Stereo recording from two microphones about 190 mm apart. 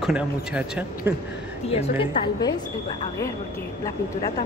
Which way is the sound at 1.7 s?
30° left (ahead or behind).